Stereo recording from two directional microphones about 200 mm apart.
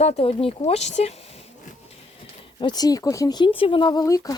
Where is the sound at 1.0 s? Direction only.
30° left (ahead or behind).